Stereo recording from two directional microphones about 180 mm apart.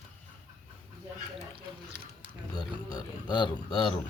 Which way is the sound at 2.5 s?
25° left (ahead or behind).